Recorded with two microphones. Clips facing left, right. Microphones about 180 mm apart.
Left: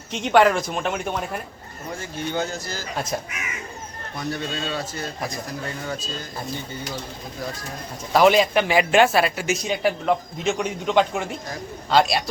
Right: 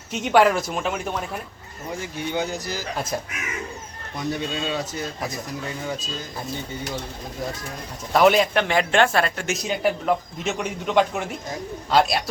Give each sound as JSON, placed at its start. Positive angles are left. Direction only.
{"t": 0.1, "sound": "a man's voice", "side_deg": -5}
{"t": 2.0, "sound": "speech", "side_deg": -15}
{"t": 4.3, "sound": "speech", "side_deg": -15}
{"t": 8.1, "sound": "a man's voice", "side_deg": 0}